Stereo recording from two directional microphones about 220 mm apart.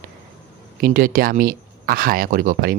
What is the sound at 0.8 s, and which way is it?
Speech, 40° right (ahead or behind).